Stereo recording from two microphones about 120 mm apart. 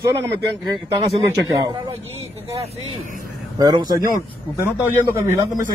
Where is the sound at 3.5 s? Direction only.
35° right (ahead or behind).